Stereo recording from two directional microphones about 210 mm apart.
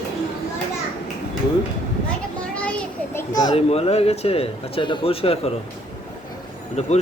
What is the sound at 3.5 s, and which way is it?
Speech, 30° left (ahead or behind).